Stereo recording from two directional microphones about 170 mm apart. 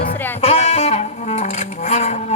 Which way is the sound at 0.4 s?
40° left (ahead or behind).